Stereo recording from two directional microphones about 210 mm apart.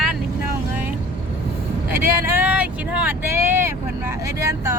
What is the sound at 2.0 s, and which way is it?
Speech, 10° right (ahead or behind).